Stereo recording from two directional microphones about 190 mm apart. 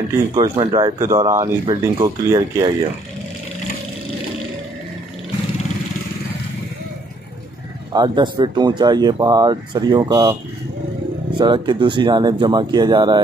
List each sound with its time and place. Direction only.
0.3 s speech: 25° right (ahead or behind)
7.9 s speech: 25° right (ahead or behind)
11.3 s speech: 25° right (ahead or behind)